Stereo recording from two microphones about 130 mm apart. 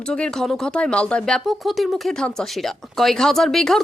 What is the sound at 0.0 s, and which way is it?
Speech, 5° left (ahead or behind).